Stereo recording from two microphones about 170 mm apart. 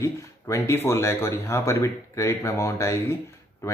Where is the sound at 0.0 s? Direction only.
15° left (ahead or behind).